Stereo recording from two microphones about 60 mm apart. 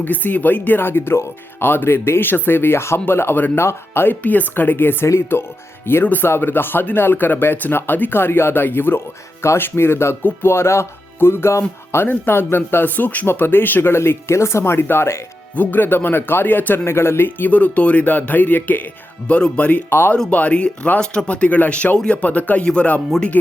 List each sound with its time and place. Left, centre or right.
0.0 s speech: left
4.2 s speech: left
13.9 s speech: left
15.5 s speech: left
19.9 s speech: left
20.3 s speech: left